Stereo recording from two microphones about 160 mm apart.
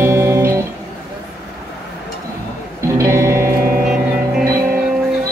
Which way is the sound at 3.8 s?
5° right (ahead or behind).